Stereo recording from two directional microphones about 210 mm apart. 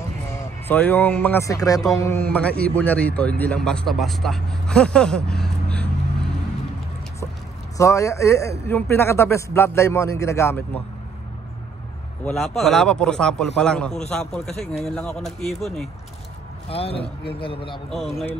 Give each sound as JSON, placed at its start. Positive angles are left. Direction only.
{"t": 0.7, "sound": "speech", "side_deg": 10}
{"t": 7.7, "sound": "speech", "side_deg": 15}
{"t": 12.3, "sound": "a man's voice", "side_deg": 0}
{"t": 16.6, "sound": "speech", "side_deg": 25}
{"t": 17.8, "sound": "a man's voice", "side_deg": 0}